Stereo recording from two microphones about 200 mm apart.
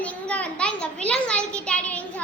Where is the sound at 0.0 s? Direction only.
5° left (ahead or behind).